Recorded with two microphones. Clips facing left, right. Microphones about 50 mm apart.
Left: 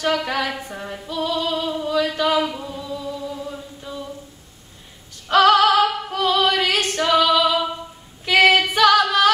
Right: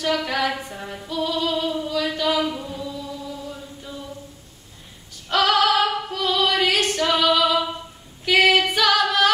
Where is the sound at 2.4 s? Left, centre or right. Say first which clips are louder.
Left 1 dB; centre.